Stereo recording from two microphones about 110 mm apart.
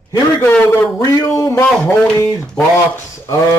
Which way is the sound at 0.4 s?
15° left (ahead or behind).